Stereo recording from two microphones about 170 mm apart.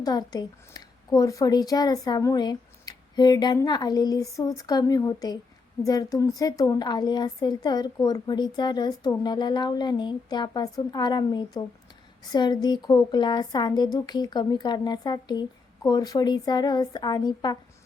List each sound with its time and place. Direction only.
0.0 s a woman's voice: 25° left (ahead or behind)